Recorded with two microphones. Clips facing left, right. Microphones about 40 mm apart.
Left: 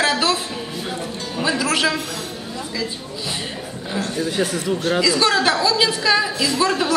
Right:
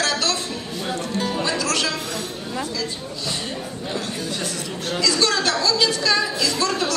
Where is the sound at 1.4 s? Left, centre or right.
Centre.